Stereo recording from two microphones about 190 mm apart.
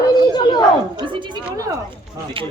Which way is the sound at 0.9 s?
25° right (ahead or behind).